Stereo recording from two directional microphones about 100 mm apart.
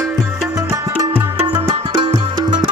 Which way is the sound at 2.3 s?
50° right (ahead or behind).